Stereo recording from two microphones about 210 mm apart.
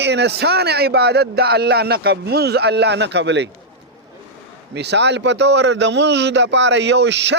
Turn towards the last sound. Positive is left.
turn(degrees=-55)  # may be behind; listen again after turning